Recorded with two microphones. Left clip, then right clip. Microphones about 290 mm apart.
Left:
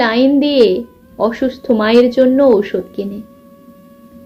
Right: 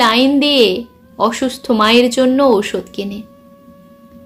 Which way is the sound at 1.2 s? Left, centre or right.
Centre.